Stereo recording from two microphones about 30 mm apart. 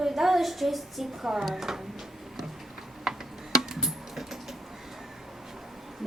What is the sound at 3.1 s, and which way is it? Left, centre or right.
Tick-tock, centre.